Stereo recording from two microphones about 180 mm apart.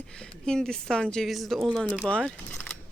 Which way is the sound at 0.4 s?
5° left (ahead or behind).